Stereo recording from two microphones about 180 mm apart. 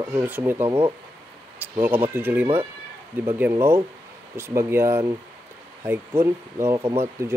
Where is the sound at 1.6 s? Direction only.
10° right (ahead or behind).